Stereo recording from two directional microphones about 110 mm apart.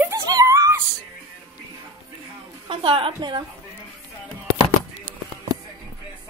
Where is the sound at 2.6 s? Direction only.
50° right (ahead or behind).